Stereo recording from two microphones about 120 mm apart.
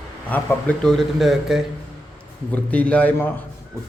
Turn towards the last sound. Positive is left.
turn(degrees=10)  # may be behind; listen again after turning